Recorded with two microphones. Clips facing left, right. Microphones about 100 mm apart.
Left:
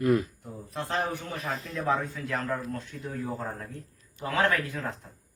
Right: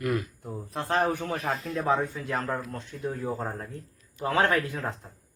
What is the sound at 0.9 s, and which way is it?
Speech, 50° right (ahead or behind).